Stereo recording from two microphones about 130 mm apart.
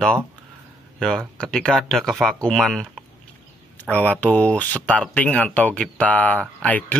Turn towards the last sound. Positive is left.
turn(degrees=10)  # may be behind; listen again after turning